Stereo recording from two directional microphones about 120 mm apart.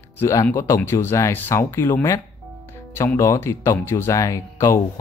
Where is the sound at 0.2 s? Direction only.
25° left (ahead or behind).